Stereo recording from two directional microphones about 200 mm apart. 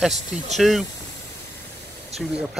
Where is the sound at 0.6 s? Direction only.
Centre (ahead or behind).